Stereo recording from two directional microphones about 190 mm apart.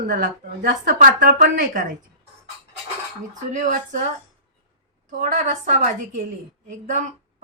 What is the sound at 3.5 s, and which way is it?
Speech, 40° right (ahead or behind).